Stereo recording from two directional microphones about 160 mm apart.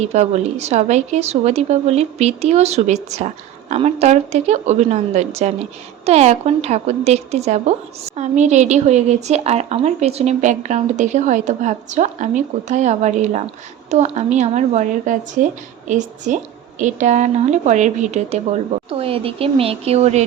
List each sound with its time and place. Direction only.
0.0 s speech: 45° right (ahead or behind)